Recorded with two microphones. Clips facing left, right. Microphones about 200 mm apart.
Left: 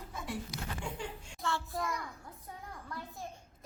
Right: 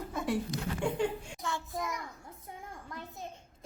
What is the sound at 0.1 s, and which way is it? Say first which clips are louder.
Speech: right 8 dB; 60° right (ahead or behind).